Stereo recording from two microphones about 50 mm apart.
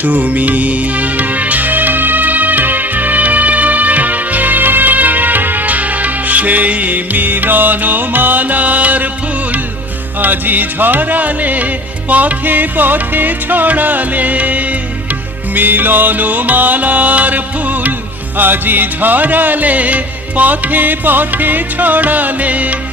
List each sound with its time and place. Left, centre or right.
0.0 s music: right
10.2 s music: right